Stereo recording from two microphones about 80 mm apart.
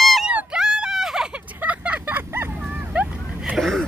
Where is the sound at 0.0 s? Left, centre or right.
Centre.